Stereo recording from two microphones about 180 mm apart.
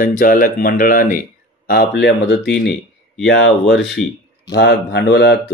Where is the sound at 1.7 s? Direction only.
60° left (ahead or behind).